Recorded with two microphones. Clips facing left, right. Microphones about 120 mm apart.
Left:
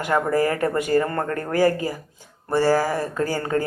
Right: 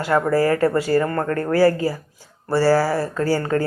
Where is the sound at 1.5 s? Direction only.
20° left (ahead or behind).